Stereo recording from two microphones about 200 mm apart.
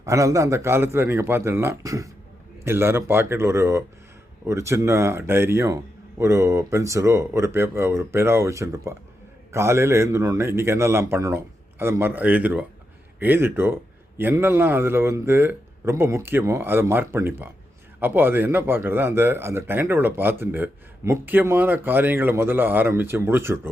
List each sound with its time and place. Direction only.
0.0 s speech: 15° right (ahead or behind)